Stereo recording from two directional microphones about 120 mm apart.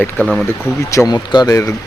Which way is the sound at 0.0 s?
5° left (ahead or behind).